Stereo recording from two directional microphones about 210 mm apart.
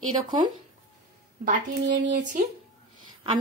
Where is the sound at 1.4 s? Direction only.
35° right (ahead or behind).